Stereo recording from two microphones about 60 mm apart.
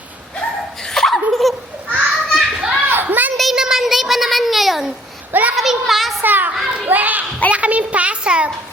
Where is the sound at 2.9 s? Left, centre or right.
Right.